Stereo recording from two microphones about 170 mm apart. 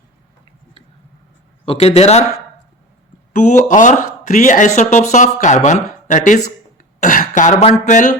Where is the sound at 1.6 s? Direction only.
35° left (ahead or behind).